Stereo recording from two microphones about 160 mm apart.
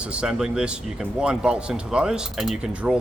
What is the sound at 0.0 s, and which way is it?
Speech, 5° right (ahead or behind).